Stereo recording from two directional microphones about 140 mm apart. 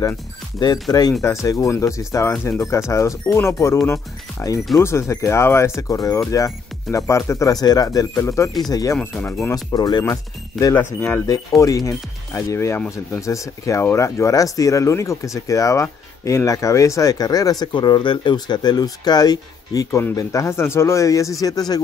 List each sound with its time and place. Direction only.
1.2 s speech: 20° left (ahead or behind)
8.9 s speech: 15° left (ahead or behind)
9.7 s speech: 30° left (ahead or behind)
10.6 s speech: 15° left (ahead or behind)